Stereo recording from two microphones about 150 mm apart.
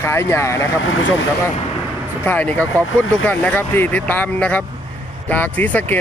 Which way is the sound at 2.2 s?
10° left (ahead or behind).